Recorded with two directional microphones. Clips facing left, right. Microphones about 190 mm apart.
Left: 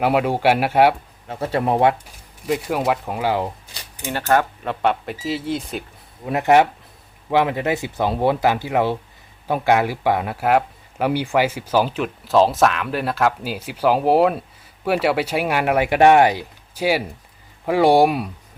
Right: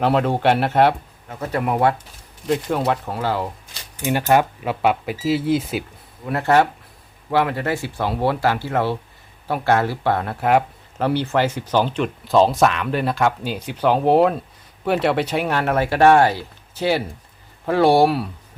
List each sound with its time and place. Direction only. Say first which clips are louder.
0.0 s speech: even; 10° left (ahead or behind)
1.3 s speech: left 2 dB; 30° left (ahead or behind)
2.5 s speech: even; 5° left (ahead or behind)
4.0 s speech: right 2 dB; 15° right (ahead or behind)
6.2 s speech: left 2 dB; 15° left (ahead or behind)